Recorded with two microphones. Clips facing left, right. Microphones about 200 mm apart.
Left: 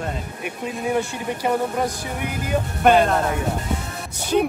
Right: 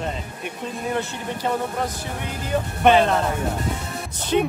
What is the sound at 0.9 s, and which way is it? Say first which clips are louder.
Speech: left 3 dB; 10° left (ahead or behind).